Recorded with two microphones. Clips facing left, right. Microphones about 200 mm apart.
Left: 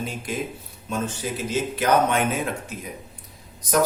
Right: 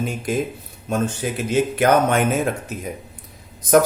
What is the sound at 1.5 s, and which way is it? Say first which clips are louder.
Speech: right 5 dB; 55° right (ahead or behind).